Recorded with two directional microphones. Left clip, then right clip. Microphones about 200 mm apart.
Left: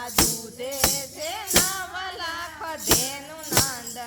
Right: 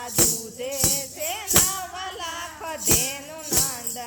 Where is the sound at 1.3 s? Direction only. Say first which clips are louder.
Even; centre (ahead or behind).